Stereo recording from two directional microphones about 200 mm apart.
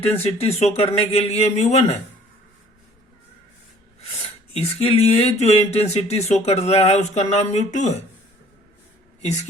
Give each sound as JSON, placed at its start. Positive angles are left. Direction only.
{"t": 0.2, "sound": "speech", "side_deg": 30}
{"t": 4.5, "sound": "speech", "side_deg": 30}